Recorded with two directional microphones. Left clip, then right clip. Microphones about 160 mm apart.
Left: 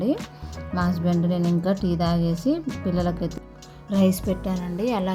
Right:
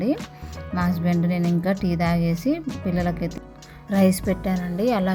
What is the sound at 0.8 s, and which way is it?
Speech, 25° right (ahead or behind).